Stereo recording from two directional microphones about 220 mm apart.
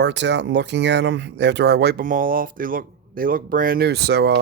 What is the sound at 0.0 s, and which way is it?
Speech, 50° right (ahead or behind).